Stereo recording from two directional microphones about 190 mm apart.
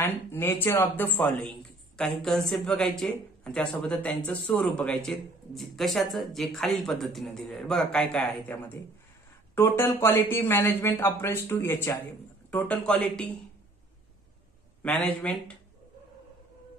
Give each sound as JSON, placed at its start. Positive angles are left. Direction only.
{"t": 0.0, "sound": "speech", "side_deg": 10}
{"t": 14.8, "sound": "speech", "side_deg": 5}